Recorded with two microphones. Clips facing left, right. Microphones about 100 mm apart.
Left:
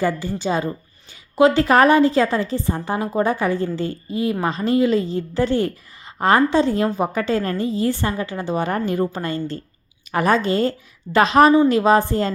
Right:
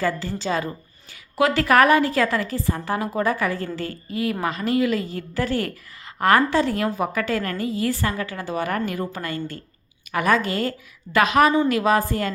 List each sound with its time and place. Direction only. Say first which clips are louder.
0.0 s a woman's voice: left 3 dB; 20° left (ahead or behind)